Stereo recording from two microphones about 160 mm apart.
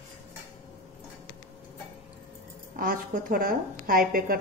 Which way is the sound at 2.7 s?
65° right (ahead or behind).